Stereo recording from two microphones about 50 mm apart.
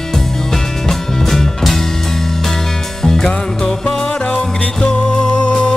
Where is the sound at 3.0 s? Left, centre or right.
Centre.